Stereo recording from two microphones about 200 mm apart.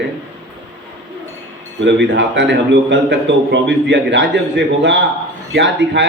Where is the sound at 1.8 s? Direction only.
60° right (ahead or behind).